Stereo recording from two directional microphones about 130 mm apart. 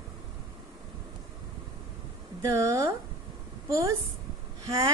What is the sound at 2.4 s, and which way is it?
A woman's voice, 25° right (ahead or behind).